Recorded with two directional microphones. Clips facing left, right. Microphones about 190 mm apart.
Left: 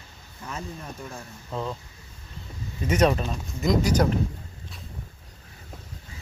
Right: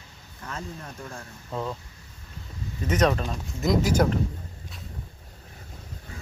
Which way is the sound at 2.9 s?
10° left (ahead or behind).